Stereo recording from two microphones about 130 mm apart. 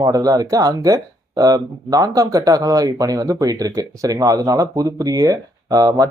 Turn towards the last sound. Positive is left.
turn(degrees=-30)  # may be behind; listen again after turning